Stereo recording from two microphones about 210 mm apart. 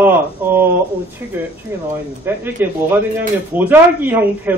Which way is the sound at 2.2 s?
10° right (ahead or behind).